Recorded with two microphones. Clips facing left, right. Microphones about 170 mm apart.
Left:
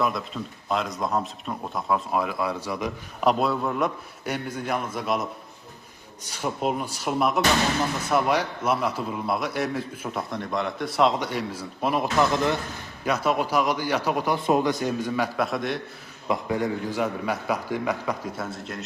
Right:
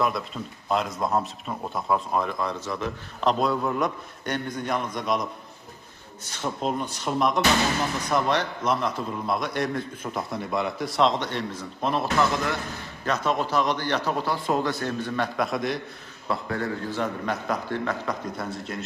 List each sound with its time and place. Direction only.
0.0 s a man's voice: centre (ahead or behind)
12.2 s speech: 20° left (ahead or behind)
13.1 s a man's voice: 10° left (ahead or behind)
16.3 s a man's voice: 15° left (ahead or behind)